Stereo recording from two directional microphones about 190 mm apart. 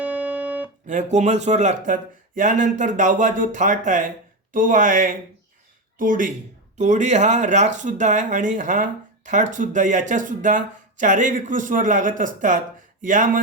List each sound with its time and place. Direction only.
0.0 s music: 10° right (ahead or behind)
0.9 s speech: 40° right (ahead or behind)